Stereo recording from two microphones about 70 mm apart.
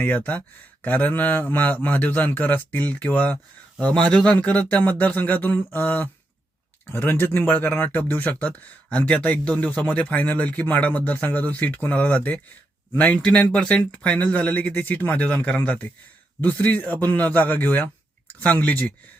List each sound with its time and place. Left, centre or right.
0.0 s speech: left